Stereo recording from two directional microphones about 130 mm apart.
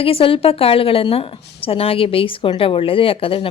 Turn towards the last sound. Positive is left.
turn(degrees=45)  # may be behind; listen again after turning